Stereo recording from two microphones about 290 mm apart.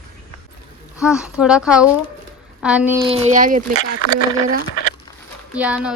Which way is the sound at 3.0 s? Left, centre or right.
Right.